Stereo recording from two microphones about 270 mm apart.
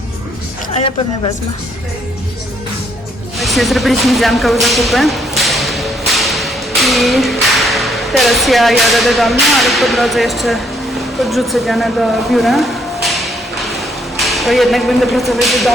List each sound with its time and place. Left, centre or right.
0.7 s a man's voice: left
3.3 s speech: centre
4.6 s whip: centre
8.9 s speech: centre